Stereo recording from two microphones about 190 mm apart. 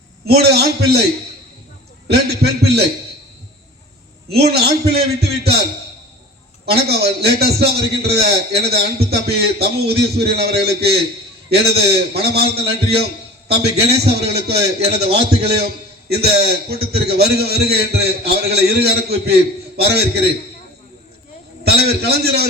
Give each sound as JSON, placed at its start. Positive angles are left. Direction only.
{"t": 0.3, "sound": "a man's voice", "side_deg": -55}
{"t": 2.0, "sound": "a man's voice", "side_deg": -60}
{"t": 4.3, "sound": "a man's voice", "side_deg": -55}
{"t": 6.7, "sound": "a man's voice", "side_deg": -55}
{"t": 14.8, "sound": "a man's voice", "side_deg": -35}
{"t": 15.2, "sound": "a man's voice", "side_deg": -60}
{"t": 21.6, "sound": "a man's voice", "side_deg": -55}